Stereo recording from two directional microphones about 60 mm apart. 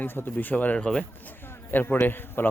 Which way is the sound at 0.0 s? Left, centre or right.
Left.